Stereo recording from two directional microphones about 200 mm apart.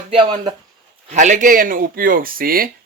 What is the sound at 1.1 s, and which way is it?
Speech, 40° right (ahead or behind).